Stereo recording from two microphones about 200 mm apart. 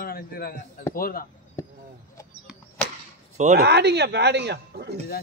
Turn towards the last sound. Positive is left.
turn(degrees=-55)  # may be behind; listen again after turning